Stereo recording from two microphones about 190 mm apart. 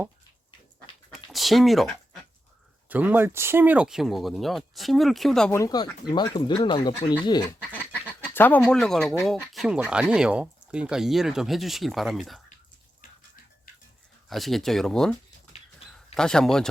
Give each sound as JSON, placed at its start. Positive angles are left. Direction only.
{"t": 1.1, "sound": "speech", "side_deg": 0}
{"t": 5.5, "sound": "speech", "side_deg": 15}
{"t": 8.3, "sound": "speech", "side_deg": 10}
{"t": 14.3, "sound": "speech", "side_deg": 0}
{"t": 16.1, "sound": "speech", "side_deg": 5}